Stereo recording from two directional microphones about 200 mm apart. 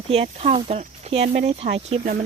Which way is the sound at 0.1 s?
30° right (ahead or behind).